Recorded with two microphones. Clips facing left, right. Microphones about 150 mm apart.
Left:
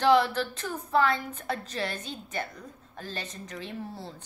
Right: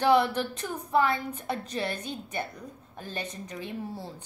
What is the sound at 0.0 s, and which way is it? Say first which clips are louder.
A woman's voice: even; 15° right (ahead or behind).